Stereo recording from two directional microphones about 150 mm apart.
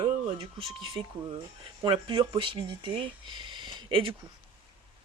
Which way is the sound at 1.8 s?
30° right (ahead or behind).